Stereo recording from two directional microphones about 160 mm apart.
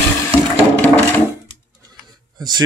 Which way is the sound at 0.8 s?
10° left (ahead or behind).